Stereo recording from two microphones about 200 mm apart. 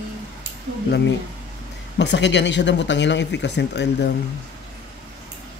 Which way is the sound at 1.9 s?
60° left (ahead or behind).